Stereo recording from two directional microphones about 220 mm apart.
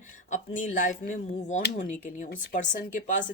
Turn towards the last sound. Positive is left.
turn(degrees=35)  # may be behind; listen again after turning